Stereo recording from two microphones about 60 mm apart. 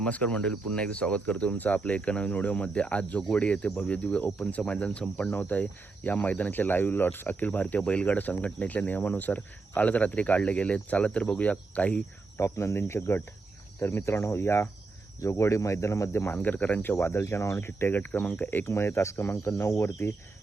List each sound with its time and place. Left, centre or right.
0.0 s cricket: left
12.4 s speech: left
16.3 s speech: left
18.6 s speech: left